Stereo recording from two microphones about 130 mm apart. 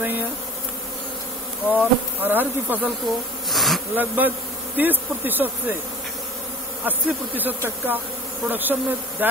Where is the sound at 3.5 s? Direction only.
Centre (ahead or behind).